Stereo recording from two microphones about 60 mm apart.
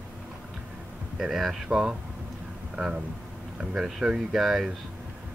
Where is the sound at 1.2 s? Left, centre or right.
Centre.